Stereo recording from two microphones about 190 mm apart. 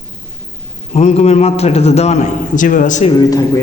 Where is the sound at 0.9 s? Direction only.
35° left (ahead or behind).